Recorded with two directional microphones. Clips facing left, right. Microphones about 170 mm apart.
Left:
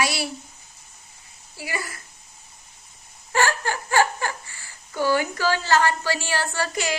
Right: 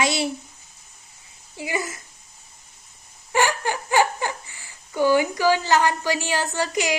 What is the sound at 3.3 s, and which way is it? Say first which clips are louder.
Speech: right 1 dB; 15° right (ahead or behind).